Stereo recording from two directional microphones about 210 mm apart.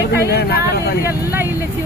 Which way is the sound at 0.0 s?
50° left (ahead or behind).